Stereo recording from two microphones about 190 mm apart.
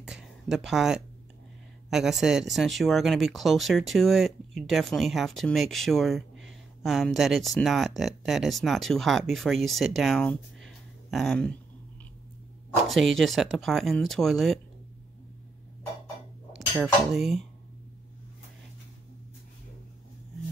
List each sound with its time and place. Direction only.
0.0 s a sound: centre (ahead or behind)
1.9 s speech: centre (ahead or behind)
12.8 s speech: centre (ahead or behind)
16.5 s speech: 5° right (ahead or behind)